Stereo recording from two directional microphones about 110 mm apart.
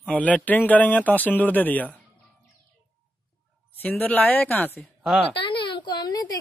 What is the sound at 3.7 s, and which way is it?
Speech, 15° left (ahead or behind).